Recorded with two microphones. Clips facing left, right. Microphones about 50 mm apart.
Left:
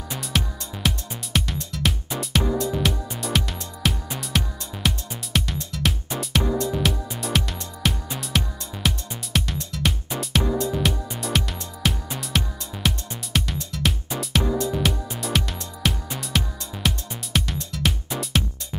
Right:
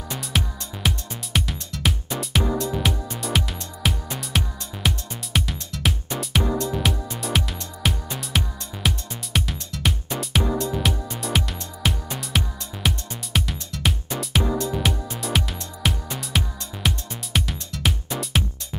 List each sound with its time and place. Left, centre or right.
0.3 s music: centre